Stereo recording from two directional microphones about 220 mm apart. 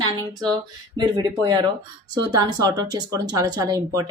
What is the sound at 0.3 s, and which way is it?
Speech, 20° right (ahead or behind).